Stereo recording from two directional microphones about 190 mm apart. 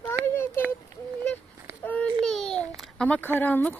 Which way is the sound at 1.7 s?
15° right (ahead or behind).